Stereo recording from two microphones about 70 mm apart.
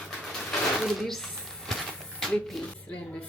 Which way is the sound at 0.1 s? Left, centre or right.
Centre.